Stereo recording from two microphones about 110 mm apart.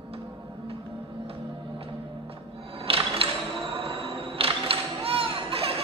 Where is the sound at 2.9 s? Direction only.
60° right (ahead or behind).